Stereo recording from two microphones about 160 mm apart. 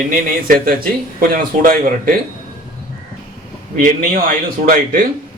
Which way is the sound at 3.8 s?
55° right (ahead or behind).